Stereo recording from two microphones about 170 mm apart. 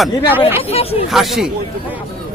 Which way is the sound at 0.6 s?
35° left (ahead or behind).